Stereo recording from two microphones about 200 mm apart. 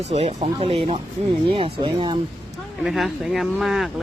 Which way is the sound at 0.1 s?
35° right (ahead or behind).